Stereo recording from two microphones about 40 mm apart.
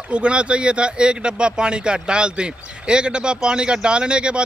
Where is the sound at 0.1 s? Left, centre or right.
Right.